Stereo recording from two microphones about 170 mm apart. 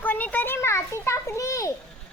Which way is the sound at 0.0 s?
10° left (ahead or behind).